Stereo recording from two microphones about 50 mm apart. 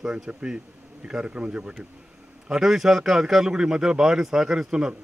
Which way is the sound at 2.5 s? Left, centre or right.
Centre.